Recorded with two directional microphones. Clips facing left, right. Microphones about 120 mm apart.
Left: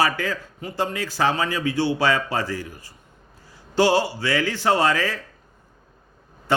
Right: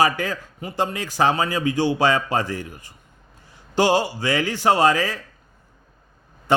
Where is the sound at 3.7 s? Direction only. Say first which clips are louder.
Even; 15° right (ahead or behind).